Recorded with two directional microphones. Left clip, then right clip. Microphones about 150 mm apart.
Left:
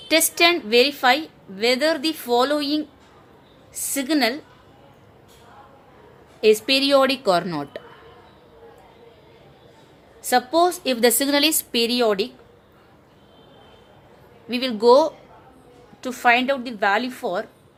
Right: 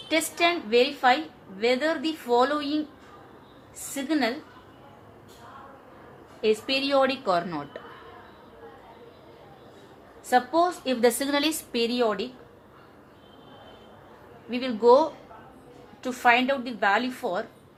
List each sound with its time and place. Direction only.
0.1 s a woman's voice: 80° left
3.9 s a woman's voice: 80° left
6.4 s a woman's voice: 90° left; by 7.8 s 65° left (ahead or behind)
10.2 s a woman's voice: 90° left
14.5 s a woman's voice: 80° left
16.0 s a woman's voice: 85° left